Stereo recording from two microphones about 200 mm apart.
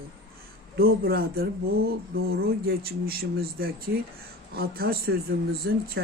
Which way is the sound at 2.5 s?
50° right (ahead or behind).